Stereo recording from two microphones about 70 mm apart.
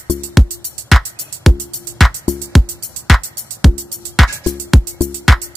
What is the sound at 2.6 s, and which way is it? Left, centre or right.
Music, centre.